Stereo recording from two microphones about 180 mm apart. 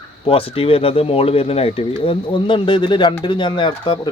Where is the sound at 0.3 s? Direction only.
30° left (ahead or behind).